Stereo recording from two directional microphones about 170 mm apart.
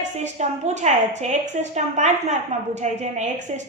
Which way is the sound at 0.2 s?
40° right (ahead or behind).